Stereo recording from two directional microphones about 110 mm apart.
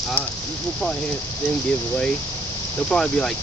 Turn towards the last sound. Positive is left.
turn(degrees=5)  # may be behind; listen again after turning